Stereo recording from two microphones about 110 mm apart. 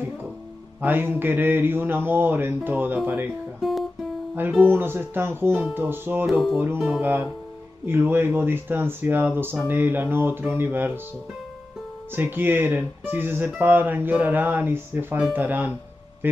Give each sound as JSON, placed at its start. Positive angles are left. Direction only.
{"t": 0.7, "sound": "speech", "side_deg": -20}
{"t": 4.4, "sound": "speech", "side_deg": -15}
{"t": 12.2, "sound": "speech", "side_deg": -20}